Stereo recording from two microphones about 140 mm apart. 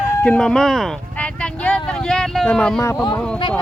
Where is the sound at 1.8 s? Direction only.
5° left (ahead or behind).